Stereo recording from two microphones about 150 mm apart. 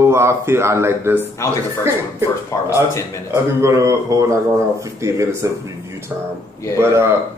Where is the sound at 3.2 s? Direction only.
20° right (ahead or behind).